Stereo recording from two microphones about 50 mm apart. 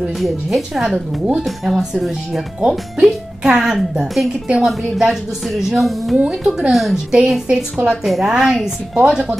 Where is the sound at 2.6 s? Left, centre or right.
Centre.